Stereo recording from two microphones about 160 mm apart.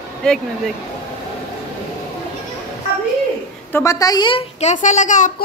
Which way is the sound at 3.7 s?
20° left (ahead or behind).